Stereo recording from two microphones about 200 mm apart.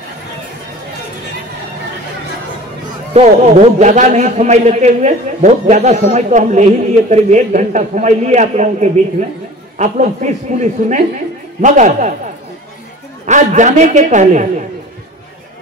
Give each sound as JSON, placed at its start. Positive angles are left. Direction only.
{"t": 3.1, "sound": "a man's voice", "side_deg": -35}
{"t": 13.3, "sound": "a man's voice", "side_deg": -35}